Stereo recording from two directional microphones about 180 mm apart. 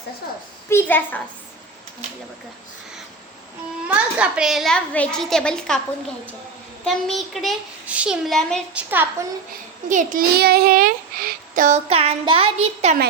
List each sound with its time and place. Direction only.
0.7 s a child's voice: 10° left (ahead or behind)
3.8 s a woman's voice: 5° right (ahead or behind)
6.8 s a woman's voice: centre (ahead or behind)
8.7 s a woman's voice: 10° right (ahead or behind)
9.9 s a child's voice: 45° right (ahead or behind)
11.9 s a child's voice: 35° right (ahead or behind)